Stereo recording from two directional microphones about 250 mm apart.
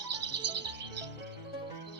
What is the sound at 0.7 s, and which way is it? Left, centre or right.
Music, right.